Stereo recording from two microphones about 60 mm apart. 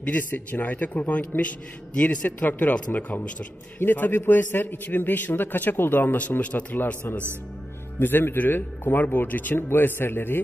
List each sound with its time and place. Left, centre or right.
0.0 s speech: left
3.8 s speech: left